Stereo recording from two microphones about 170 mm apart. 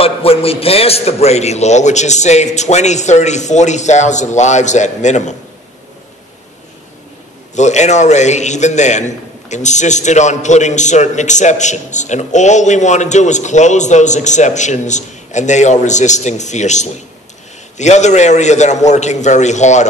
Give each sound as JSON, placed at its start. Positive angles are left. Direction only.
{"t": 0.0, "sound": "a man's voice", "side_deg": 35}
{"t": 7.5, "sound": "a man's voice", "side_deg": 45}